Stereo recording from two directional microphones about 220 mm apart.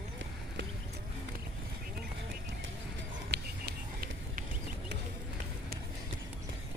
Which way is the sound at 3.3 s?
45° right (ahead or behind).